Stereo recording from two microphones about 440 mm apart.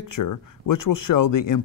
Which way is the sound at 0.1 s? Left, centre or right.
Left.